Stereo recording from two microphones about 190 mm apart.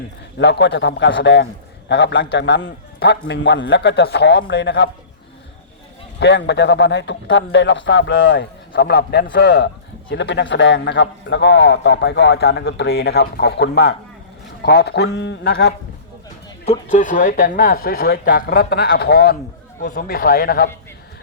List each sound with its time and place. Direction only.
0.3 s a man's voice: 65° left (ahead or behind)
6.1 s a man's voice: 65° left (ahead or behind)
9.3 s a man's voice: 65° left (ahead or behind)
16.9 s speech: 45° left (ahead or behind)